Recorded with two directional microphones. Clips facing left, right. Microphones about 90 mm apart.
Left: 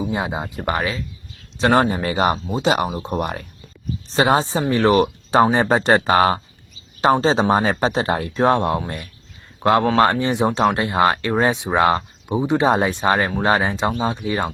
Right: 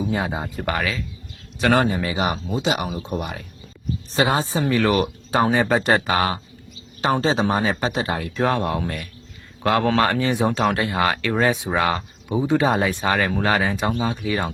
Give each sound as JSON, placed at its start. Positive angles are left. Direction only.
{"t": 0.1, "sound": "speech", "side_deg": 20}
{"t": 4.1, "sound": "a man's voice", "side_deg": 30}